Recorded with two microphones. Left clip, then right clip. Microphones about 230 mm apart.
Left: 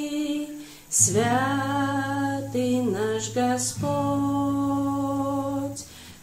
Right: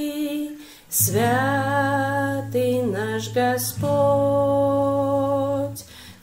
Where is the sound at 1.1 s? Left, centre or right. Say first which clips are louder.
Right 5 dB; right.